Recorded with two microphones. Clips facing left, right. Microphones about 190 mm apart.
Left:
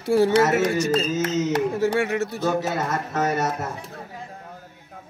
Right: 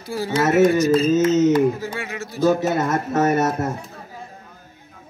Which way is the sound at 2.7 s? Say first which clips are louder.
Right 5 dB; 50° right (ahead or behind).